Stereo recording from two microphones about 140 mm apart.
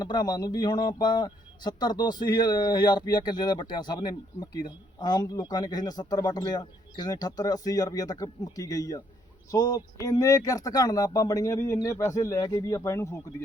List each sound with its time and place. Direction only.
0.0 s a man's voice: 30° left (ahead or behind)